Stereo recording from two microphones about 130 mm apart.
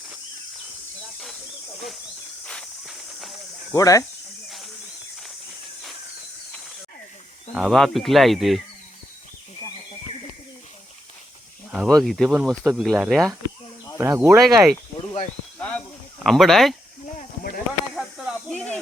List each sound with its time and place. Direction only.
2.4 s walk: 5° left (ahead or behind)
3.8 s speech: 25° left (ahead or behind)
4.4 s a sound: centre (ahead or behind)
7.5 s speech: centre (ahead or behind)
11.7 s speech: centre (ahead or behind)
14.0 s speech: 20° right (ahead or behind)
14.4 s speech: centre (ahead or behind)
14.9 s a sound: 55° left (ahead or behind)
15.5 s a sound: 10° left (ahead or behind)
16.2 s speech: centre (ahead or behind)
17.7 s snake: 5° right (ahead or behind)
18.5 s snake: 10° left (ahead or behind)